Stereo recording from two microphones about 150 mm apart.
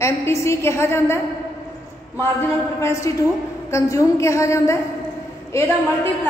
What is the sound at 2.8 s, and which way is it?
A woman's voice, 20° left (ahead or behind).